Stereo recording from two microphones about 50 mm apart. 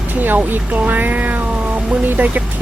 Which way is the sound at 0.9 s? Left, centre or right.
Right.